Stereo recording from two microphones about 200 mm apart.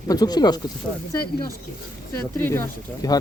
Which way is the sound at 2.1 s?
10° left (ahead or behind).